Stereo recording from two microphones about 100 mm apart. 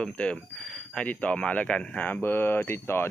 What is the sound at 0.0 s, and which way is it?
Speech, 10° left (ahead or behind).